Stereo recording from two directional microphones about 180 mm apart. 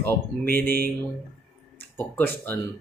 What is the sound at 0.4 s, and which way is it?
Speech, 55° right (ahead or behind).